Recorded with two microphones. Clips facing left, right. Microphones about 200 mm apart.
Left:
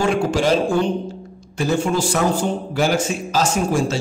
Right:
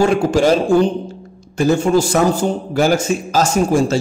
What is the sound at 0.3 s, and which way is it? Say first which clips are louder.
Speech: right 4 dB; 40° right (ahead or behind).